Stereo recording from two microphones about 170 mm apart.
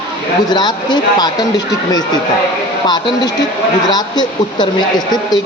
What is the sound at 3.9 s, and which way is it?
Speech, 25° left (ahead or behind).